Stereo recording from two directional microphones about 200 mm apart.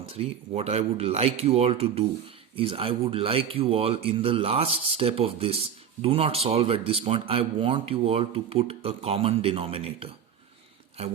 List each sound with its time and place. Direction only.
0.1 s speech: 30° right (ahead or behind)